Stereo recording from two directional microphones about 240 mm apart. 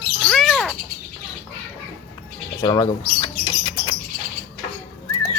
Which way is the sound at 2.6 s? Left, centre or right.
Centre.